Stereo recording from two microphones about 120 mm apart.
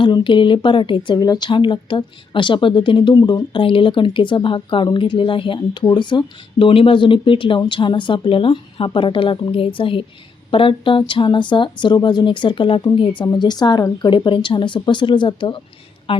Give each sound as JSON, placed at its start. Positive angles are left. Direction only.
{"t": 0.0, "sound": "a woman's voice", "side_deg": 40}
{"t": 13.2, "sound": "speech", "side_deg": 35}